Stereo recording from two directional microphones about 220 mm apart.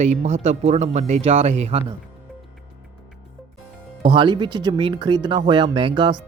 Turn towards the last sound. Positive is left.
turn(degrees=-20)  # may be behind; listen again after turning